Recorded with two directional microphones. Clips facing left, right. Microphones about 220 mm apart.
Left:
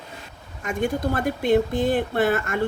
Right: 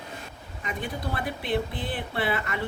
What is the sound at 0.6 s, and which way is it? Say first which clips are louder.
Speech: left 9 dB; 45° left (ahead or behind).